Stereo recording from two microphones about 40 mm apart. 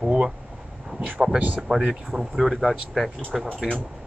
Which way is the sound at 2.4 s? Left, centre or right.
Centre.